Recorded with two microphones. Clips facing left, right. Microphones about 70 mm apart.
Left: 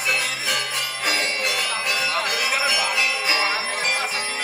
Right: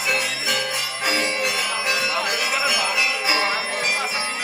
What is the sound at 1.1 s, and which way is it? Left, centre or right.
Bell, centre.